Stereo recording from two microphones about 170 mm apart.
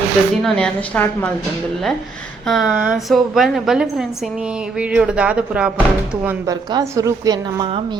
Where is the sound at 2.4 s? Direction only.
Centre (ahead or behind).